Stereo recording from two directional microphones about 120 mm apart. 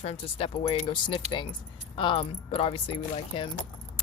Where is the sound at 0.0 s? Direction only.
55° left (ahead or behind).